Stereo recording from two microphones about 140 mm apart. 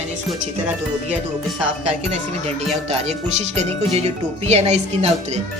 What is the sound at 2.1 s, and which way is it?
Music, 50° right (ahead or behind).